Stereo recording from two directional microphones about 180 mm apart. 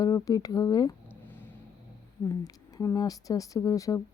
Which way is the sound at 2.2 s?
15° left (ahead or behind).